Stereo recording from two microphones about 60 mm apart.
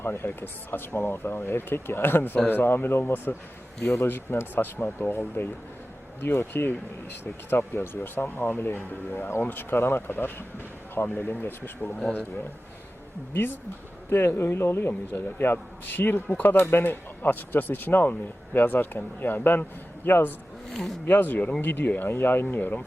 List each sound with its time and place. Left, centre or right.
0.0 s speech: left
3.8 s a man's voice: centre
4.0 s speech: left
14.1 s speech: left